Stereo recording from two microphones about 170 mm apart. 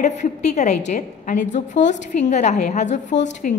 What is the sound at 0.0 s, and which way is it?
A woman's voice, 45° left (ahead or behind).